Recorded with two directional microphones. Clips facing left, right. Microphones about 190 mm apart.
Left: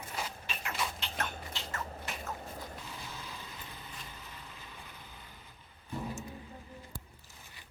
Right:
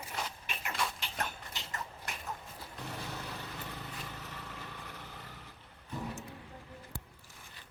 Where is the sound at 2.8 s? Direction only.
65° right (ahead or behind).